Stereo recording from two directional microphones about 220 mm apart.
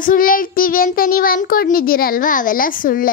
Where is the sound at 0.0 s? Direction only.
40° left (ahead or behind).